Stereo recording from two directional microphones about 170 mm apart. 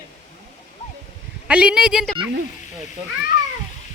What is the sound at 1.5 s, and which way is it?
Speech, 5° right (ahead or behind).